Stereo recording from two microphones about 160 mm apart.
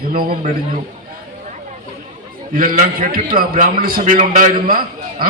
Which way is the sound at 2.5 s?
65° right (ahead or behind).